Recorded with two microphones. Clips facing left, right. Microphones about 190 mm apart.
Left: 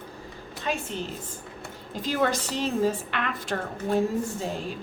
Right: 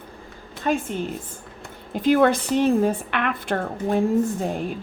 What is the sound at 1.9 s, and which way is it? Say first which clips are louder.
A woman's voice: right 8 dB; 55° right (ahead or behind).